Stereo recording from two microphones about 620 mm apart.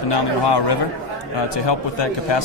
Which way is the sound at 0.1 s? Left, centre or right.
Left.